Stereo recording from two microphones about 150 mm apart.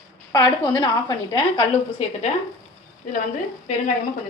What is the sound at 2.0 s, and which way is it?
Speech, 45° left (ahead or behind).